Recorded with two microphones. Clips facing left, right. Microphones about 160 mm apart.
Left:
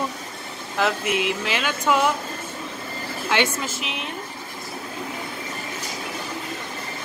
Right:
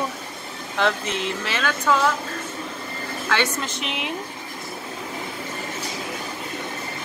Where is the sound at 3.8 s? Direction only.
Centre (ahead or behind).